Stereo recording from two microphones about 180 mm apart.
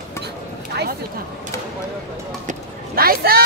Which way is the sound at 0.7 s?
65° right (ahead or behind).